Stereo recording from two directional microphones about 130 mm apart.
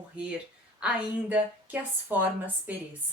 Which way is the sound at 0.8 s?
10° right (ahead or behind).